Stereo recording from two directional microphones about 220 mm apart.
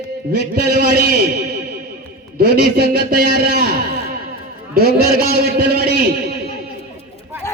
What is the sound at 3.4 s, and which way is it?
Speech, 45° right (ahead or behind).